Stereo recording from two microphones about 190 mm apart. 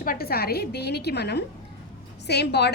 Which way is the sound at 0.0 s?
50° left (ahead or behind).